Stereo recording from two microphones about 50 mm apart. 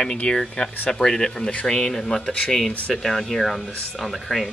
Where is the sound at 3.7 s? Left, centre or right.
Centre.